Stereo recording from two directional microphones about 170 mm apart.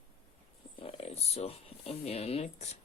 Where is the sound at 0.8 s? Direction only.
35° left (ahead or behind).